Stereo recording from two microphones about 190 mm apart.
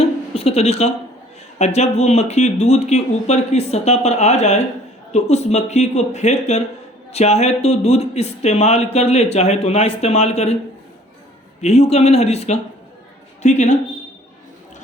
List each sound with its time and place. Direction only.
0.0 s a sound: 30° left (ahead or behind)
1.5 s speech: 35° left (ahead or behind)
11.6 s speech: 35° left (ahead or behind)